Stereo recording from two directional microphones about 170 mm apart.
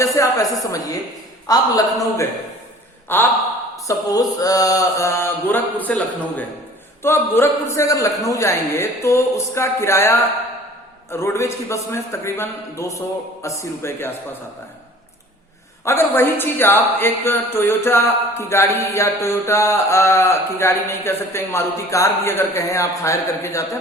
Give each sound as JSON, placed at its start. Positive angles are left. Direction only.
{"t": 0.0, "sound": "a woman's voice", "side_deg": 20}
{"t": 1.5, "sound": "mantra", "side_deg": 20}
{"t": 3.1, "sound": "a woman's voice", "side_deg": 10}
{"t": 3.8, "sound": "mantra", "side_deg": 20}
{"t": 5.8, "sound": "a woman's voice", "side_deg": 10}
{"t": 15.8, "sound": "a woman's voice", "side_deg": 15}